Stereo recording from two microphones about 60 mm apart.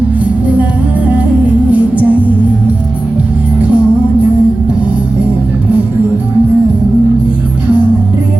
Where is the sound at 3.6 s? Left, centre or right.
Right.